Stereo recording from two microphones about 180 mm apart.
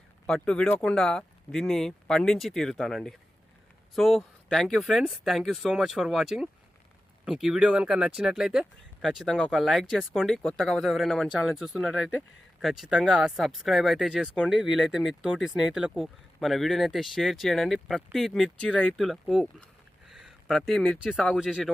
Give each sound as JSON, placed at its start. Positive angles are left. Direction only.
{"t": 0.3, "sound": "speech", "side_deg": 5}